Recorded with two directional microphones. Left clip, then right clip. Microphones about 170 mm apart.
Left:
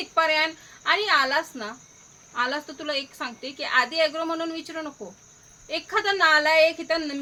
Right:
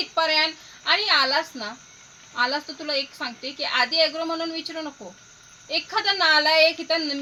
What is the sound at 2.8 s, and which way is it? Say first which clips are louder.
Speech: right 2 dB; 15° left (ahead or behind).